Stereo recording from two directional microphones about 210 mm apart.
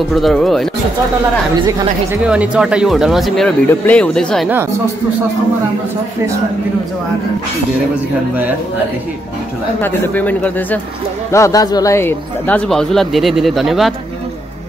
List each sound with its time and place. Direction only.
0.1 s a man's voice: centre (ahead or behind)
2.2 s a man's voice: 5° right (ahead or behind)
9.8 s a man's voice: 10° left (ahead or behind)